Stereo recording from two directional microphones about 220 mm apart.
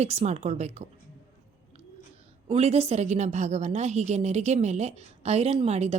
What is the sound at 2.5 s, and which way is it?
A woman's voice, 30° right (ahead or behind).